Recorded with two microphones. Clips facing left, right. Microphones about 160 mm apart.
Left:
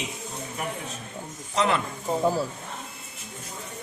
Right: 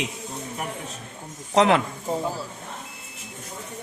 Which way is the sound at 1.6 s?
80° right.